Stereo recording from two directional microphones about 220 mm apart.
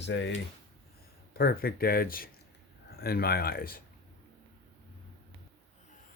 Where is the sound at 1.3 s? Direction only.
45° left (ahead or behind).